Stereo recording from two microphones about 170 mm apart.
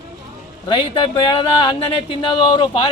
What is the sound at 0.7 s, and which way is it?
Speech, 30° left (ahead or behind).